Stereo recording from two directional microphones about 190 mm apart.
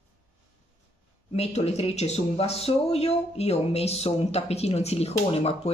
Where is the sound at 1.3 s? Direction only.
35° left (ahead or behind).